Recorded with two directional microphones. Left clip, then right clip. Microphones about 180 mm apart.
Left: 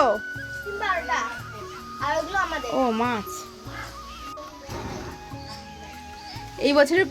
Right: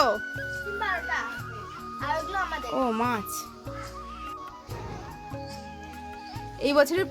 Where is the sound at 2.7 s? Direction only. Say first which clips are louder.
Left 2 dB; 15° right (ahead or behind).